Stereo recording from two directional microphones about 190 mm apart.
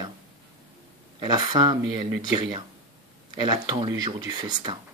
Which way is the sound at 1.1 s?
20° right (ahead or behind).